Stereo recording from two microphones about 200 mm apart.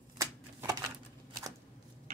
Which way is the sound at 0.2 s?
15° right (ahead or behind).